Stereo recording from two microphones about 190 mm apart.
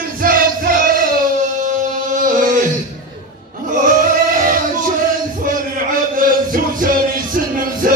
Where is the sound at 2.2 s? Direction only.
45° right (ahead or behind).